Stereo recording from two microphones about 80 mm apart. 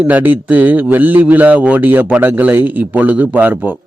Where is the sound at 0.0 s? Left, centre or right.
Right.